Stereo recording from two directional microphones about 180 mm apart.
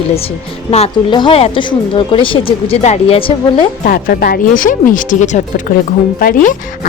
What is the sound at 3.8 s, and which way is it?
Speech, 55° left (ahead or behind).